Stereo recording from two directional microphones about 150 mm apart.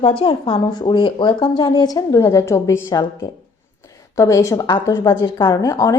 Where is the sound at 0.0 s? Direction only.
35° left (ahead or behind).